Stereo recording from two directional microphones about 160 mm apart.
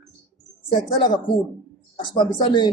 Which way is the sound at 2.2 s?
30° left (ahead or behind).